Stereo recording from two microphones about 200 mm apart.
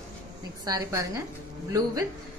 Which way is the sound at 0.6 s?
20° right (ahead or behind).